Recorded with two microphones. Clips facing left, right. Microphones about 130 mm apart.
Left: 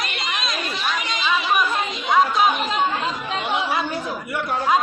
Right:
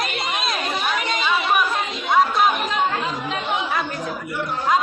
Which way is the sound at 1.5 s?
5° right (ahead or behind).